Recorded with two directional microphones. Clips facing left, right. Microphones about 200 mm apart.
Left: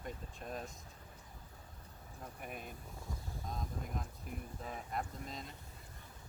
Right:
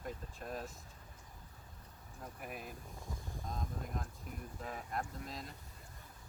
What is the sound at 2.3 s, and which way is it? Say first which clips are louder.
Speech: right 1 dB; centre (ahead or behind).